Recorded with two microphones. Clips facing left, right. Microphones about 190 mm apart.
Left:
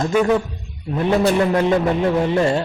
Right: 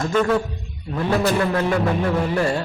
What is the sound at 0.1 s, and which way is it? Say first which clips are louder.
A man's voice: left 1 dB; 10° left (ahead or behind).